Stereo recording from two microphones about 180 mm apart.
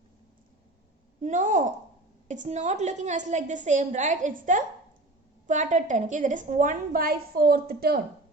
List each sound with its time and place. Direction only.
1.2 s a woman's voice: 45° right (ahead or behind)